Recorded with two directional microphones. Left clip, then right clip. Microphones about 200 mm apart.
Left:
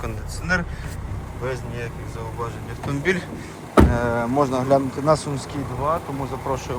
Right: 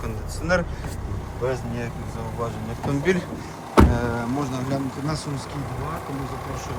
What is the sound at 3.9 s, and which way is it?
Speech, 10° right (ahead or behind).